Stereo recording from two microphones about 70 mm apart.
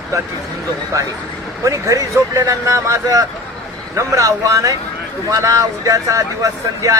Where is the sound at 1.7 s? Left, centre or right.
Right.